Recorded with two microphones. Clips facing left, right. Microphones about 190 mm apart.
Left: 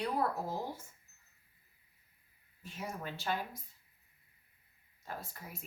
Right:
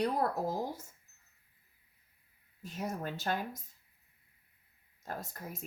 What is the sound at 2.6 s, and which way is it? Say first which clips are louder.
A woman's voice: right 5 dB; 40° right (ahead or behind).